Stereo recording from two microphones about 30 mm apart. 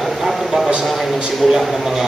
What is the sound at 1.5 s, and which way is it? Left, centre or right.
Speech, centre.